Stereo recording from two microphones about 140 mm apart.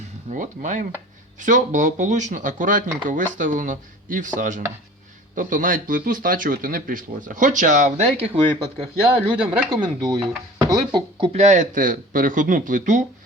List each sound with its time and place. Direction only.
0.3 s a man's voice: 65° right (ahead or behind); by 8.9 s 40° right (ahead or behind)
9.4 s speech: 10° right (ahead or behind)
9.6 s speech: 35° right (ahead or behind)
11.3 s a man's voice: 50° right (ahead or behind)